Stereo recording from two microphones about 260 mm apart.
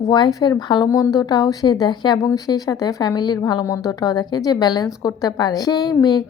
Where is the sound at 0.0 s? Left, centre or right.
Centre.